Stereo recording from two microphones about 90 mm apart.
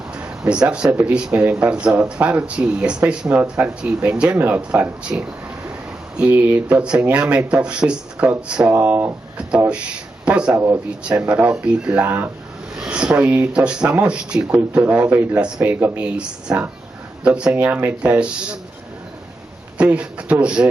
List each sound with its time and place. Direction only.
0.4 s a man's voice: 10° right (ahead or behind)
10.2 s speech: 10° right (ahead or behind)
12.8 s a man's voice: 10° right (ahead or behind)
19.8 s speech: 15° right (ahead or behind)